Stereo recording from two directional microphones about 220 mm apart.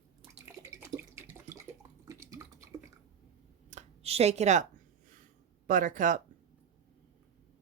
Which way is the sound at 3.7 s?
30° right (ahead or behind).